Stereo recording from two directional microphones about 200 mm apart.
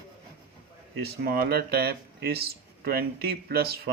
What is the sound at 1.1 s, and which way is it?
Speech, 50° right (ahead or behind).